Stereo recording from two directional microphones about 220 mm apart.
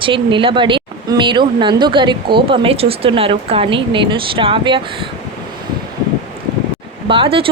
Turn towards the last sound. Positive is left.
turn(degrees=-25)  # may be behind; listen again after turning